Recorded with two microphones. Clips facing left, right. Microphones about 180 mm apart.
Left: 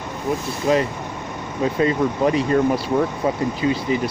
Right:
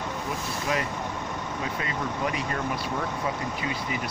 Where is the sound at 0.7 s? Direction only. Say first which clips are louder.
Left 10 dB; 30° left (ahead or behind).